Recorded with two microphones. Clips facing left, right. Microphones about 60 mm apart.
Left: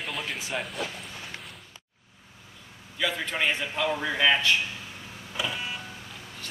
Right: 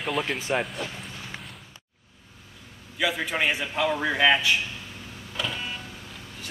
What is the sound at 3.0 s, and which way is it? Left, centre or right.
A man's voice, centre.